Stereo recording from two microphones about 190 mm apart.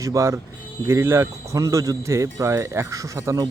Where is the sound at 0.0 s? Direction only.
15° right (ahead or behind).